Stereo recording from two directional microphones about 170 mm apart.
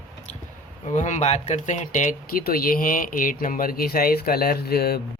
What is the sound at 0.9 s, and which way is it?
Speech, 45° left (ahead or behind).